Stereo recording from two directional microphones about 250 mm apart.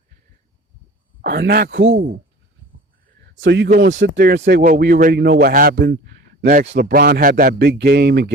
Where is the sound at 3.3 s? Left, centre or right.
Right.